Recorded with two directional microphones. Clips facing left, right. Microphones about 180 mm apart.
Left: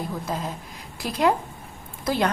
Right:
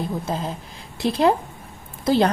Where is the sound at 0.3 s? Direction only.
30° right (ahead or behind).